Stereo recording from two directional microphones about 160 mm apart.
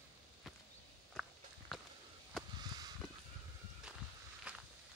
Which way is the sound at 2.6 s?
25° right (ahead or behind).